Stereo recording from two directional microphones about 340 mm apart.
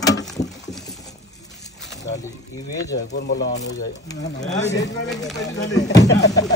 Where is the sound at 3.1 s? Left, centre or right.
Left.